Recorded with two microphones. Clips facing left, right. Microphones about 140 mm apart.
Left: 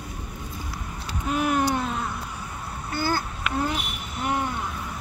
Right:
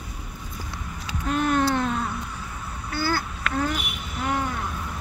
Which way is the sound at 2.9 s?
20° left (ahead or behind).